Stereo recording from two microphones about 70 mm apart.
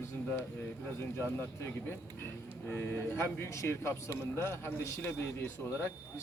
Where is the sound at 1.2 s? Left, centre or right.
Left.